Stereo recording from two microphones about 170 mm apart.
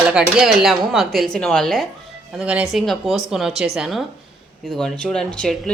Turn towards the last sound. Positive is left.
turn(degrees=5)  # may be behind; listen again after turning